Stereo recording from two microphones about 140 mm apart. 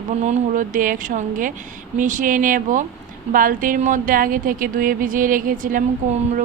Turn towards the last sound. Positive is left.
turn(degrees=-70)  # may be behind; listen again after turning